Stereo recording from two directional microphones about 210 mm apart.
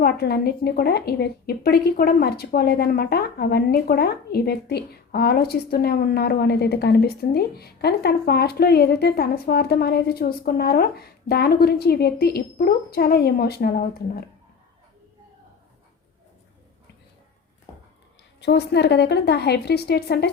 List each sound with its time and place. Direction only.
0.0 s speech: 50° left (ahead or behind)
18.3 s speech: 55° left (ahead or behind)